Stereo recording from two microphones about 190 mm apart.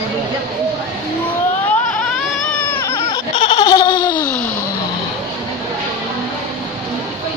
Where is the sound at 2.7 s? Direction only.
10° left (ahead or behind).